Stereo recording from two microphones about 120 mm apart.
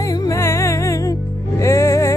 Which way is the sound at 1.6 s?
25° left (ahead or behind).